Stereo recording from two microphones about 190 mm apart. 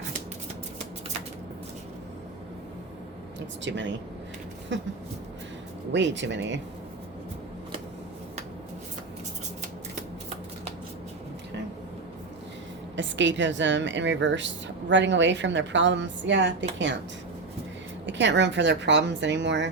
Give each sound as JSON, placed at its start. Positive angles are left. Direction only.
{"t": 3.6, "sound": "speech", "side_deg": -70}
{"t": 5.9, "sound": "speech", "side_deg": -70}
{"t": 13.0, "sound": "speech", "side_deg": -75}
{"t": 18.0, "sound": "speech", "side_deg": -70}